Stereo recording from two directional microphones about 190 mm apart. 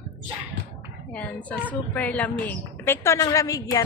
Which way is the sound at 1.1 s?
5° left (ahead or behind).